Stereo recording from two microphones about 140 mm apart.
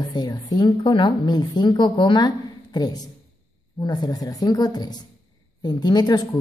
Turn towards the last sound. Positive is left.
turn(degrees=30)  # may be behind; listen again after turning